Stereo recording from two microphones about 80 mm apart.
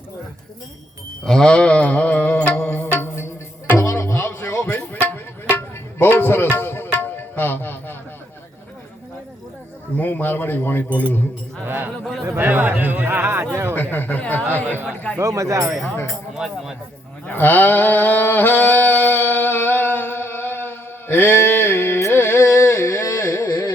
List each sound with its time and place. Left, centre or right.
1.2 s music: centre; by 3.2 s left
3.8 s music: left
4.0 s a sound: left
10.0 s a man's voice: left
11.6 s speech: right
13.9 s speech: left
15.2 s speech: right
16.3 s speech: centre
17.2 s a sound: left